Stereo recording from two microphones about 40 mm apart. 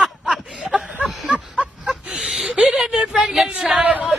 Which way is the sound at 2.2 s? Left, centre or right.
Centre.